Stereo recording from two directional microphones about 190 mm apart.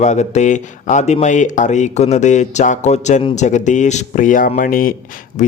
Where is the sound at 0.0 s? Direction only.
35° left (ahead or behind).